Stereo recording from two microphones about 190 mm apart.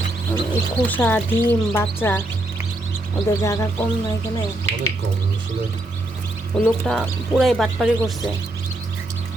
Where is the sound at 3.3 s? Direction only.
15° left (ahead or behind).